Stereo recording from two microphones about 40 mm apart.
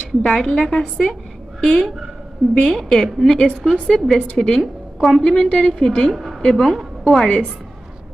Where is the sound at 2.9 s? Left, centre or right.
Centre.